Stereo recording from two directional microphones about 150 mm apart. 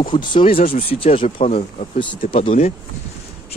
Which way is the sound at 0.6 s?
65° left (ahead or behind).